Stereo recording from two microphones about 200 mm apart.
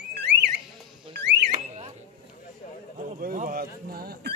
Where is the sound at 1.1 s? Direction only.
60° right (ahead or behind).